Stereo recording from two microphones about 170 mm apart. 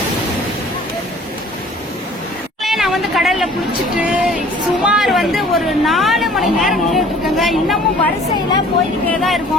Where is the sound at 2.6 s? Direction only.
Centre (ahead or behind).